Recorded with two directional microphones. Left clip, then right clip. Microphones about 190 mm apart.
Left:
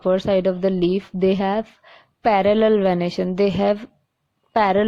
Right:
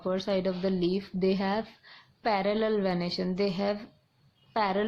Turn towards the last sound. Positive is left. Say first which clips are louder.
# left 11 dB
turn(degrees=40)  # may be behind; listen again after turning